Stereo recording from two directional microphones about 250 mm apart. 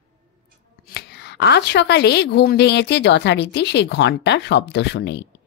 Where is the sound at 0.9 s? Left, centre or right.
Left.